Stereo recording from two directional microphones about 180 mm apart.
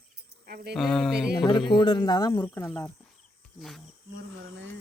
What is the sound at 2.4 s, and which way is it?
Speech, 10° left (ahead or behind).